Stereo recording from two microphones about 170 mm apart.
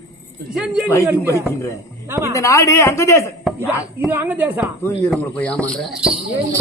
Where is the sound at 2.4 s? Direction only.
20° left (ahead or behind).